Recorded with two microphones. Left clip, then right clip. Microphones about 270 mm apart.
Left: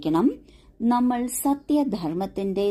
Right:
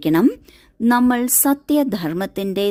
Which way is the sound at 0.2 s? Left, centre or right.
Right.